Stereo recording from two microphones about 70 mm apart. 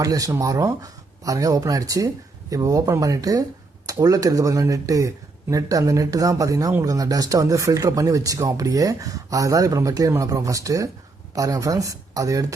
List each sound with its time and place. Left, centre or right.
0.0 s speech: right